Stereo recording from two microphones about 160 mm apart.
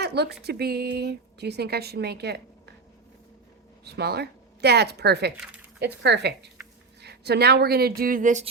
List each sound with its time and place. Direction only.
0.0 s a woman's voice: 90° right
3.8 s a woman's voice: 90° right; by 8.4 s 50° right (ahead or behind)